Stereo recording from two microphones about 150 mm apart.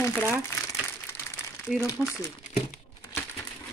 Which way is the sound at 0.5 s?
15° left (ahead or behind).